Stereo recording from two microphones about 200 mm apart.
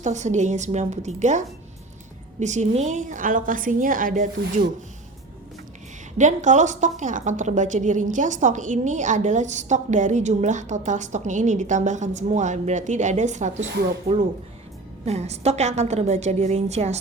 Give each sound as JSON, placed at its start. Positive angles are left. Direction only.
{"t": 0.0, "sound": "a woman's voice", "side_deg": -35}
{"t": 6.1, "sound": "a woman's voice", "side_deg": -40}